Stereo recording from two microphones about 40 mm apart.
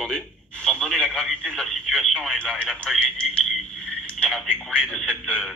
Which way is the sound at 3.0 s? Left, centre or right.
Left.